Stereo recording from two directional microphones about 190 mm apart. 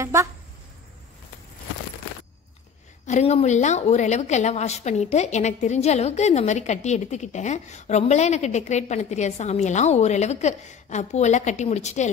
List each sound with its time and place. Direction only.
0.0 s speech: 15° right (ahead or behind)
3.1 s a woman's voice: 35° left (ahead or behind)